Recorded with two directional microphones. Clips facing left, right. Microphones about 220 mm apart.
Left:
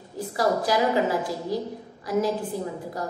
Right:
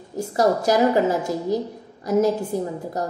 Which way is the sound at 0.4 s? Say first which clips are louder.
Right 4 dB; 45° right (ahead or behind).